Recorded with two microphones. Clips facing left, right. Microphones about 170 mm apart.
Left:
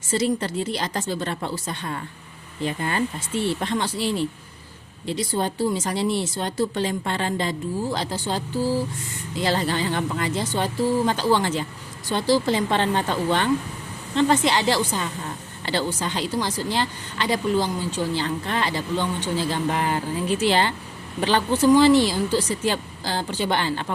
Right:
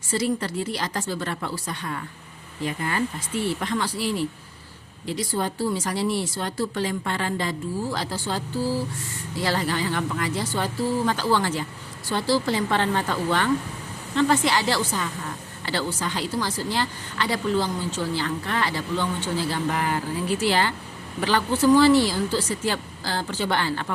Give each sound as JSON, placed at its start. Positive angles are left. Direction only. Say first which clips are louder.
{"t": 0.1, "sound": "speech", "louder": "left 2 dB", "side_deg": 20}